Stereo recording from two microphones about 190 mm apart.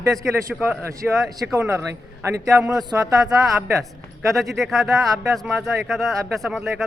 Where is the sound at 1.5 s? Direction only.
15° right (ahead or behind).